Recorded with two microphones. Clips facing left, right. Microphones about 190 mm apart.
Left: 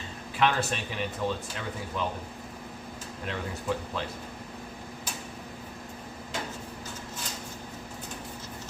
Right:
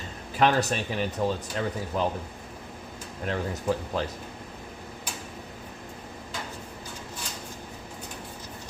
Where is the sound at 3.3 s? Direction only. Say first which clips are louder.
Right 4 dB; 40° right (ahead or behind).